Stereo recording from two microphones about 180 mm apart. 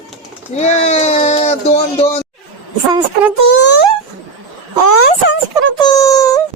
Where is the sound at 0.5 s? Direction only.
40° left (ahead or behind).